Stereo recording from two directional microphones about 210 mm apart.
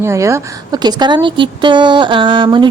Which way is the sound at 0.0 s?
15° right (ahead or behind).